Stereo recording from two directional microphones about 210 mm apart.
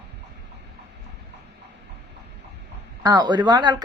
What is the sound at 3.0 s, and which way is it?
Speech, 20° right (ahead or behind).